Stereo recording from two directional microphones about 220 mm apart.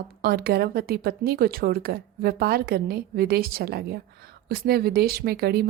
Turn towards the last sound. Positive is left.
turn(degrees=-45)  # may be behind; listen again after turning